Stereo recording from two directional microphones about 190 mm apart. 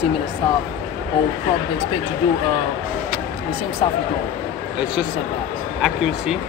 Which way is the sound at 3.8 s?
30° left (ahead or behind).